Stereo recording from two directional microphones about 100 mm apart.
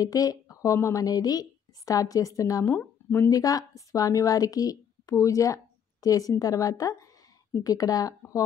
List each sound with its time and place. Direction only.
0.0 s a woman's voice: 35° left (ahead or behind)